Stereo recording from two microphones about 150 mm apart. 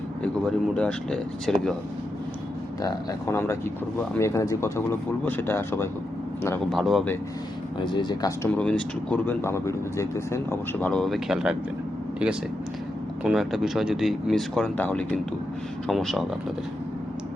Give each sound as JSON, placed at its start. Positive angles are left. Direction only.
{"t": 0.2, "sound": "speech", "side_deg": 5}
{"t": 2.8, "sound": "speech", "side_deg": 20}
{"t": 6.7, "sound": "speech", "side_deg": 0}
{"t": 7.9, "sound": "speech", "side_deg": 30}
{"t": 8.5, "sound": "speech", "side_deg": 10}